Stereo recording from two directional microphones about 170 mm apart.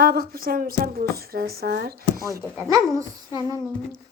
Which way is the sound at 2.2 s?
20° right (ahead or behind).